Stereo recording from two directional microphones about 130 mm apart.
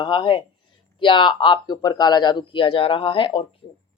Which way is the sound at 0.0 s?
40° left (ahead or behind).